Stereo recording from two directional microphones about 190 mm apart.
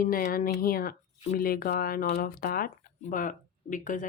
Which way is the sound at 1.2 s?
40° left (ahead or behind).